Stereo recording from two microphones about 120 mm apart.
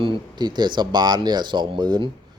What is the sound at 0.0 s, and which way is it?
A man's voice, 40° right (ahead or behind).